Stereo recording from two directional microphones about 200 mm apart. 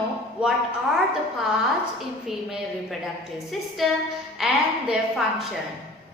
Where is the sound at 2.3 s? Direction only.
Centre (ahead or behind).